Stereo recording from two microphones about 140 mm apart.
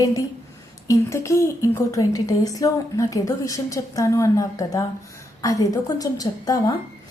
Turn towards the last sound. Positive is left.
turn(degrees=25)  # may be behind; listen again after turning